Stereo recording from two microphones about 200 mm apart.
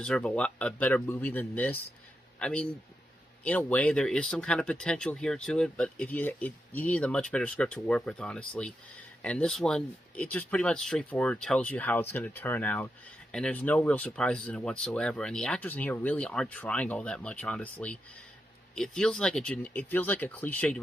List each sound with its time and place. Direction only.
0.0 s speech: 5° left (ahead or behind)